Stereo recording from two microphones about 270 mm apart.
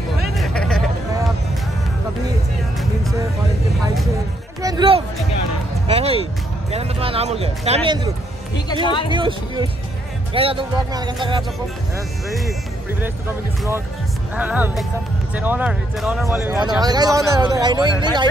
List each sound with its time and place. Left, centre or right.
0.2 s a sound: centre
4.6 s music: centre
6.7 s speech: right
8.8 s speech: centre
9.1 s speech: centre
14.3 s speech: centre